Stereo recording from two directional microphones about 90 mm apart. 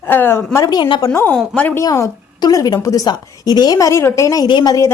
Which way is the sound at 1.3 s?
15° left (ahead or behind).